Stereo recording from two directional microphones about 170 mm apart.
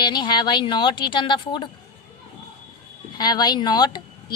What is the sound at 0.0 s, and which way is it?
A woman's voice, 25° left (ahead or behind).